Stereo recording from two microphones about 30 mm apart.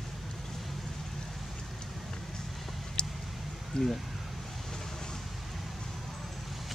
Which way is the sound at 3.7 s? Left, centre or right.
Left.